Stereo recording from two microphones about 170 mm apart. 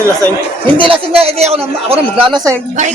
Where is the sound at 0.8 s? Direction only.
30° right (ahead or behind).